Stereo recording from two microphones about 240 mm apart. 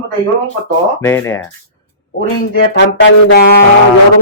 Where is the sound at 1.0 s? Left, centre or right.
Centre.